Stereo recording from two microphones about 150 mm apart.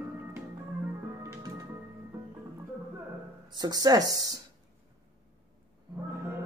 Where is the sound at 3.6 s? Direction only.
25° right (ahead or behind).